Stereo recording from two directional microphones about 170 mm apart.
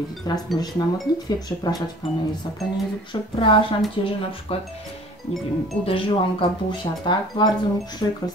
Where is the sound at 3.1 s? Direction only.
30° left (ahead or behind).